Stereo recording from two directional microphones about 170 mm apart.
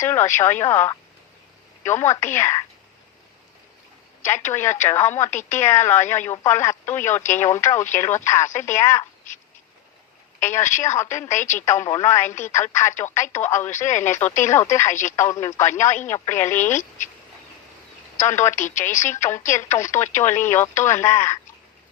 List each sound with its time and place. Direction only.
0.0 s speech: 15° left (ahead or behind)
4.2 s speech: 15° left (ahead or behind)
10.8 s speech: 15° left (ahead or behind)
11.3 s a woman's voice: 45° left (ahead or behind)
11.6 s speech: 15° left (ahead or behind)
18.2 s speech: 15° left (ahead or behind)